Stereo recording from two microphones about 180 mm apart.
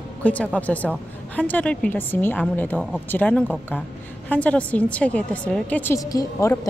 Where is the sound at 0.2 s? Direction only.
10° left (ahead or behind).